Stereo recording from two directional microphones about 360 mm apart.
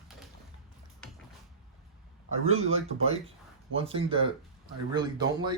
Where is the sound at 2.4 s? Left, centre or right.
Right.